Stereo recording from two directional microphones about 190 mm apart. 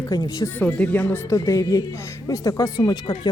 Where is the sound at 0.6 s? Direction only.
5° left (ahead or behind).